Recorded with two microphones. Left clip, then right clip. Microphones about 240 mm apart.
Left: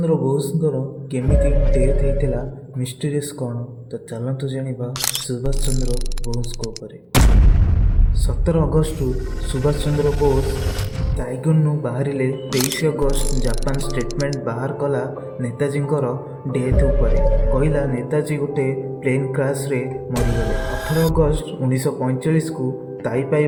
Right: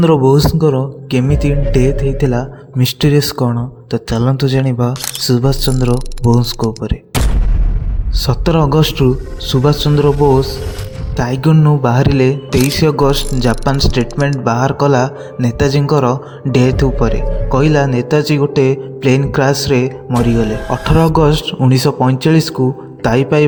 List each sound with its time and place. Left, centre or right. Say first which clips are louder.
0.0 s a man's voice: right 9 dB; right
4.9 s speech: even; centre
5.3 s a man's voice: right 11 dB; right
5.7 s speech: right 10 dB; centre
7.1 s a sound: left 1 dB; centre
8.2 s a man's voice: right 7 dB; right
9.9 s speech: right 8 dB; centre
11.2 s a man's voice: right 9 dB; right
12.5 s speech: right 7 dB; centre
12.8 s a man's voice: right 8 dB; right
14.0 s speech: right 7 dB; centre
14.4 s a man's voice: right 10 dB; right
20.5 s speech: right 7 dB; centre
21.2 s a man's voice: right 7 dB; right